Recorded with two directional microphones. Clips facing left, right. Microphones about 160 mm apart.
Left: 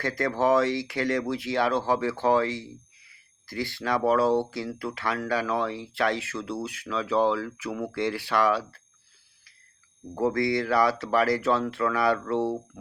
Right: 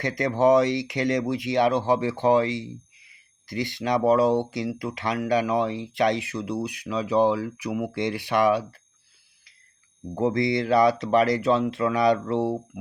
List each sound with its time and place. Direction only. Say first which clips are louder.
0.0 s speech: right 4 dB; 20° right (ahead or behind)
10.2 s speech: right 2 dB; 20° right (ahead or behind)